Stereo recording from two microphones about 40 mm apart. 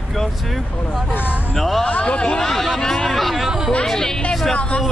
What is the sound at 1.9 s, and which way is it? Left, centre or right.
Speech, left.